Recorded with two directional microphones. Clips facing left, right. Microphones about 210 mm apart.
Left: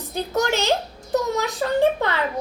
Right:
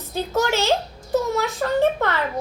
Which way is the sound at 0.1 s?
15° left (ahead or behind).